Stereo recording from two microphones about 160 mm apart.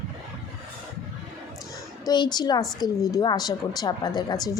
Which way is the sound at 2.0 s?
25° left (ahead or behind).